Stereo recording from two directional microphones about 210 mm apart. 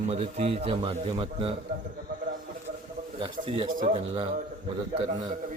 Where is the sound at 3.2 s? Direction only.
25° right (ahead or behind).